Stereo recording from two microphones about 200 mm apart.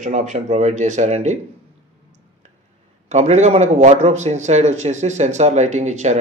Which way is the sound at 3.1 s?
35° right (ahead or behind).